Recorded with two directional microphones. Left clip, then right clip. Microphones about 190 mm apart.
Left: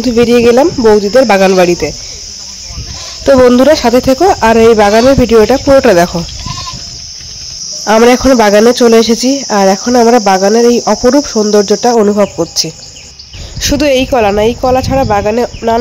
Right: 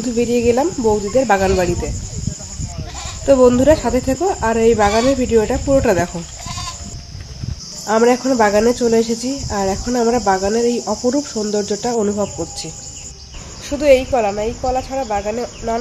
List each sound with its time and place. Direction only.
0.0 s speech: 50° left (ahead or behind)
3.4 s speech: 55° left (ahead or behind)
7.8 s speech: 55° left (ahead or behind)
13.6 s speech: 55° left (ahead or behind)